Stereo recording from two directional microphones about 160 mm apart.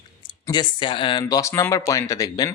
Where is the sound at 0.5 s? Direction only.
30° left (ahead or behind).